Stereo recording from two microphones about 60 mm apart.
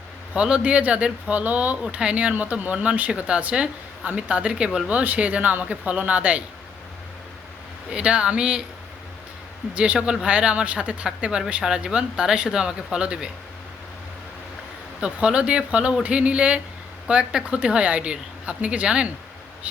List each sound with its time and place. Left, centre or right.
0.3 s a woman's voice: centre
7.9 s speech: centre
9.7 s a woman's voice: right
15.0 s a woman's voice: centre